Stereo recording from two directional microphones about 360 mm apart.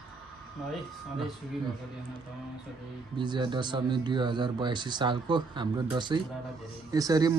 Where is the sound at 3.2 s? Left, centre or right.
Centre.